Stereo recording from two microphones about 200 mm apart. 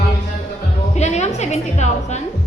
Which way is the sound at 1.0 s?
35° left (ahead or behind).